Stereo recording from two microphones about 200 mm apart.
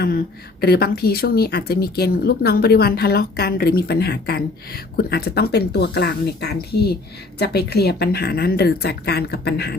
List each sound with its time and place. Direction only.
0.0 s speech: 50° left (ahead or behind)